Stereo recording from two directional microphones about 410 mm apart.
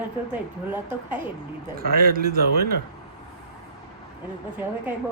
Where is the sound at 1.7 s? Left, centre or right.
Right.